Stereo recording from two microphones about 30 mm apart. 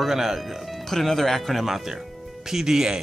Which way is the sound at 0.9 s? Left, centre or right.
Centre.